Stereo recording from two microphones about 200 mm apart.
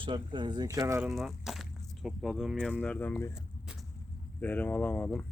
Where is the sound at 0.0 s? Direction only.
25° right (ahead or behind).